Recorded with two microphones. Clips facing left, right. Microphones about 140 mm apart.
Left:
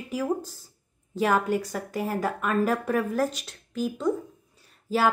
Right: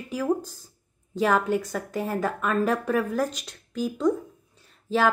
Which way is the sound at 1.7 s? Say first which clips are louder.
Right 1 dB; 10° left (ahead or behind).